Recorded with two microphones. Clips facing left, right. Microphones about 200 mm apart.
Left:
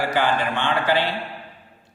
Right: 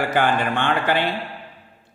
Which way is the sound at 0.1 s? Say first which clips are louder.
Right 2 dB; 50° right (ahead or behind).